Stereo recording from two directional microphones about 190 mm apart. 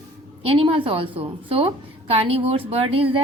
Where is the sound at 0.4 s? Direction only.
30° right (ahead or behind).